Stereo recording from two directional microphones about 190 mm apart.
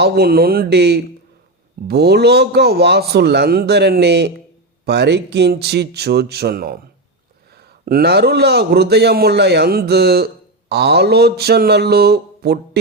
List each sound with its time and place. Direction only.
0.0 s a man's voice: 55° right (ahead or behind)